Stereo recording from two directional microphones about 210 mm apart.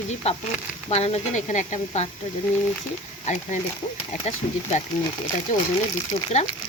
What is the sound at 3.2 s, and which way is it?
Speech, 35° left (ahead or behind).